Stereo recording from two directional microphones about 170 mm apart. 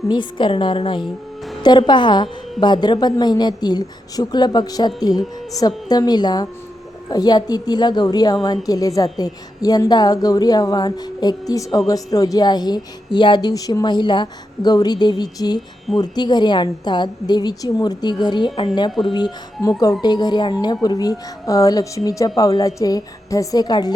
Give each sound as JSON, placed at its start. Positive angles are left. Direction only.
{"t": 0.1, "sound": "speech", "side_deg": 30}
{"t": 18.9, "sound": "speech", "side_deg": 0}
{"t": 19.1, "sound": "speech", "side_deg": 25}